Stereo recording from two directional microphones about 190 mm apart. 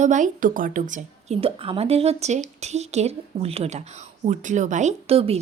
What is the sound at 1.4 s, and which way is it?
A woman's voice, 30° right (ahead or behind).